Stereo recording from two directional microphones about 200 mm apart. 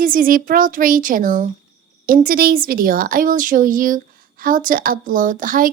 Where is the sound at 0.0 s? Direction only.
45° right (ahead or behind).